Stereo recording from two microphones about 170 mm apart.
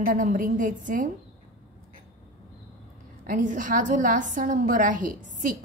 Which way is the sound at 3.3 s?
50° right (ahead or behind).